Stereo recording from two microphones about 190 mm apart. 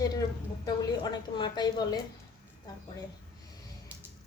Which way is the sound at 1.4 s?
20° left (ahead or behind).